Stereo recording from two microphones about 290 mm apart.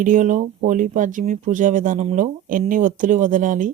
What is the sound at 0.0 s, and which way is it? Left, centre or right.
Speech, right.